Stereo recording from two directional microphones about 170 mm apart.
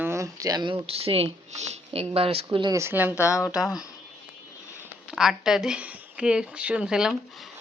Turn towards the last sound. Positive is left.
turn(degrees=-5)  # may be behind; listen again after turning